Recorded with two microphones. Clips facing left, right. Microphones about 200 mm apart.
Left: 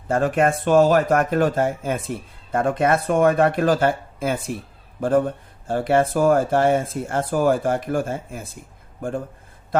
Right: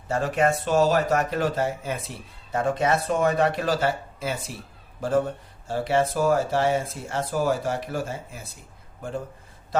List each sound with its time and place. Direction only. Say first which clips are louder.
0.1 s a man's voice: left 4 dB; 50° left (ahead or behind)